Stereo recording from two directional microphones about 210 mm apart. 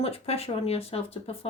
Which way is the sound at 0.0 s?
30° left (ahead or behind).